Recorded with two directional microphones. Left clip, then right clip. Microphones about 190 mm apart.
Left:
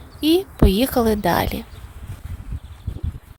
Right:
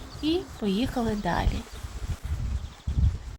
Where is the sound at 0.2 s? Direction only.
60° left (ahead or behind).